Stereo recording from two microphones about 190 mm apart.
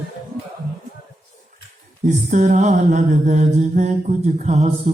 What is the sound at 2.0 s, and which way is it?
Mantra, 40° right (ahead or behind).